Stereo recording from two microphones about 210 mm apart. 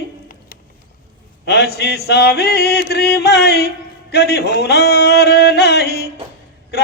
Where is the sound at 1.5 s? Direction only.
50° left (ahead or behind).